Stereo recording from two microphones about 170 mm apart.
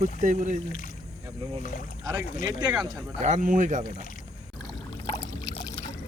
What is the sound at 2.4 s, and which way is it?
Speech, 20° right (ahead or behind).